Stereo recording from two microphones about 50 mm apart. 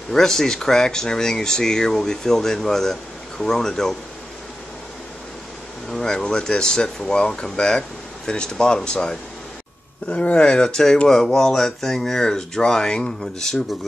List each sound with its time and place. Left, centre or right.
0.1 s speech: centre
5.9 s speech: centre